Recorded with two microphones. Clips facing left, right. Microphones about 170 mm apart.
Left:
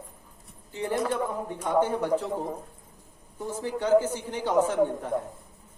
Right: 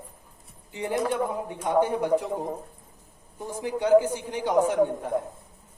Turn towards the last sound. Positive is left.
turn(degrees=-15)  # may be behind; listen again after turning